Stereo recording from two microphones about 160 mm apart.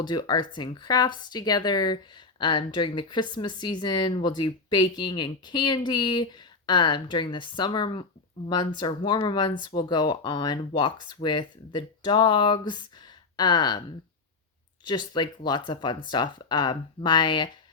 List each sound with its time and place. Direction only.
0.0 s speech: 25° left (ahead or behind)
14.8 s speech: 30° left (ahead or behind)